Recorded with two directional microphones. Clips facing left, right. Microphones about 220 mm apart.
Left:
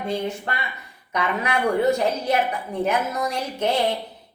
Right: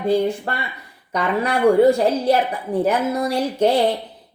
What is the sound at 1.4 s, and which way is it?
A woman's voice, 30° right (ahead or behind).